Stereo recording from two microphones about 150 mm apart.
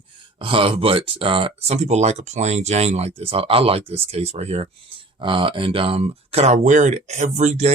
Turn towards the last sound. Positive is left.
turn(degrees=-50)  # may be behind; listen again after turning